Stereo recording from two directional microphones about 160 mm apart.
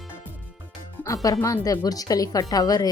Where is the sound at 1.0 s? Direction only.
20° left (ahead or behind).